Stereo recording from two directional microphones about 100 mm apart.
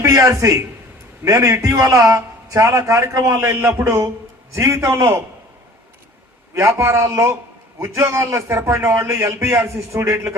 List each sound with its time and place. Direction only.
0.0 s a man's voice: 30° right (ahead or behind)
6.5 s a man's voice: 25° right (ahead or behind)